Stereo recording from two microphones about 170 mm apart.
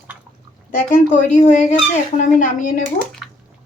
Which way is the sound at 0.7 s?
50° left (ahead or behind).